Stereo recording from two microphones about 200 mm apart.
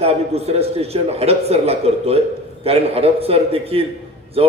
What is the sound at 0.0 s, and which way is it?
A man's voice, 30° right (ahead or behind).